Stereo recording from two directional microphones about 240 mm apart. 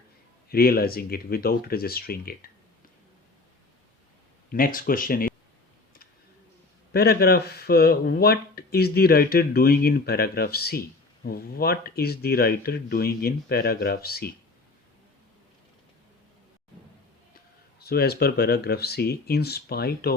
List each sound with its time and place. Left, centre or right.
0.5 s speech: left
4.5 s speech: left
6.9 s speech: left
17.7 s speech: left